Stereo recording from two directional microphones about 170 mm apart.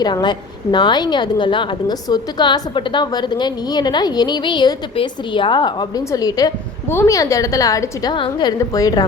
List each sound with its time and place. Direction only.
0.0 s a woman's voice: 25° left (ahead or behind)